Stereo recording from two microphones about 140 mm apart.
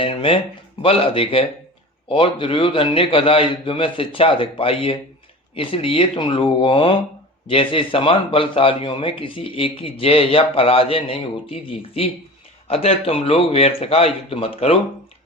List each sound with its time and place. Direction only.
0.0 s a man's voice: 40° left (ahead or behind)